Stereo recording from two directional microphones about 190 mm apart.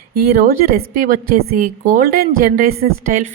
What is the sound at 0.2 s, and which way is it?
A woman's voice, 55° right (ahead or behind).